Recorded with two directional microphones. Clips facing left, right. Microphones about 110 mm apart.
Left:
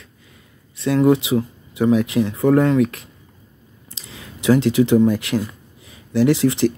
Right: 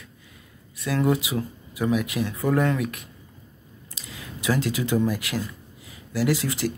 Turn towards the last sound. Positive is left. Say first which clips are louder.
# left 8 dB
turn(degrees=25)  # may be behind; listen again after turning